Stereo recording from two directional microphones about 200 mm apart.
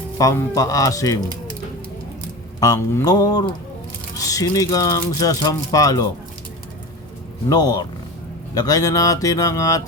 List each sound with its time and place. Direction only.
0.2 s speech: 15° left (ahead or behind)
2.6 s mantra: 15° left (ahead or behind)
4.2 s speech: 15° left (ahead or behind)
7.5 s mantra: 20° left (ahead or behind)
8.5 s speech: 20° left (ahead or behind)